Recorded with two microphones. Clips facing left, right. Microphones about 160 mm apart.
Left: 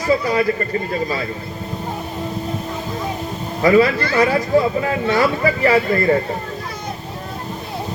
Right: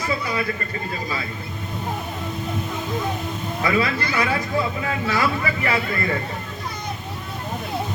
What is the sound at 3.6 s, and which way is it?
Speech, 35° left (ahead or behind).